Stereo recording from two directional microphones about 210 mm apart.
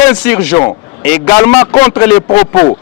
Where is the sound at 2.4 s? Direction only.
20° left (ahead or behind).